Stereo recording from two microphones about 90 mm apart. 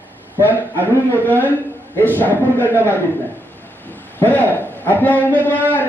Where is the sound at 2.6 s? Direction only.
25° right (ahead or behind).